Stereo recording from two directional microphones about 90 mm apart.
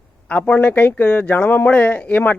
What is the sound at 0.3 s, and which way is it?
Speech, 15° left (ahead or behind).